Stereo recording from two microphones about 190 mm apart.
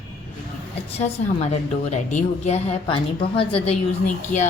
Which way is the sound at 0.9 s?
35° left (ahead or behind).